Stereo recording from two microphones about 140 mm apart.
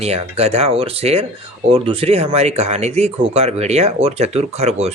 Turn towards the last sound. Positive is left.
turn(degrees=-50)  # may be behind; listen again after turning